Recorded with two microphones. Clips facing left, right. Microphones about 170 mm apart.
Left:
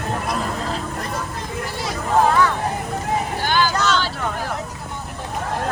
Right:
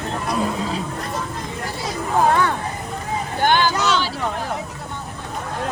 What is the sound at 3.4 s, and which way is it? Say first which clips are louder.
Vehicle: right 5 dB; 55° right (ahead or behind).